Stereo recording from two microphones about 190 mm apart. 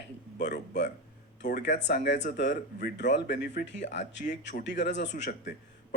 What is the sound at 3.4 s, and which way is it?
Speech, 40° left (ahead or behind).